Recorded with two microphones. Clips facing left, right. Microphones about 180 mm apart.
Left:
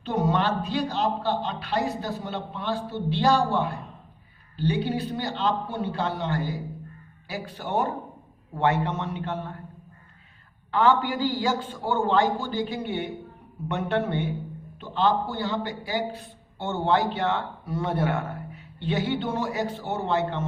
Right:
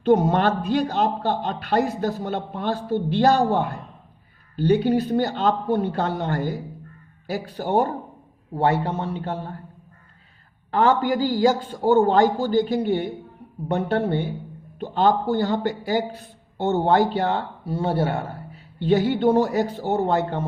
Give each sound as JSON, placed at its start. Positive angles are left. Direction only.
{"t": 0.0, "sound": "a man's voice", "side_deg": -45}
{"t": 10.7, "sound": "a man's voice", "side_deg": -45}